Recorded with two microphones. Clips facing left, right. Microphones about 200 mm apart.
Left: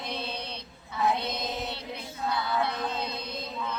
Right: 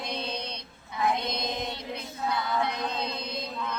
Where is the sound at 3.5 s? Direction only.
5° left (ahead or behind).